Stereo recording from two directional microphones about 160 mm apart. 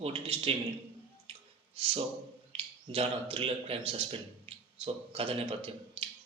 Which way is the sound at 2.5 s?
40° right (ahead or behind).